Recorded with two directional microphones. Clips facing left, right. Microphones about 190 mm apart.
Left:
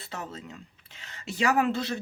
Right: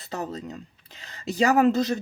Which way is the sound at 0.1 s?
35° right (ahead or behind).